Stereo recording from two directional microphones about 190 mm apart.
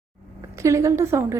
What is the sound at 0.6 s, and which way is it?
Speech, 15° right (ahead or behind).